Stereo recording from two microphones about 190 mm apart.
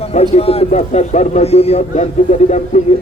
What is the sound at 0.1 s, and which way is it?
Speech, 35° left (ahead or behind).